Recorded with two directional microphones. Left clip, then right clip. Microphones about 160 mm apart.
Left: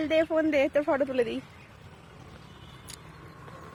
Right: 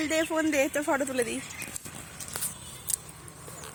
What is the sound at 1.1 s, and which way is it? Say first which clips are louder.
Speech: left 2 dB; 25° left (ahead or behind).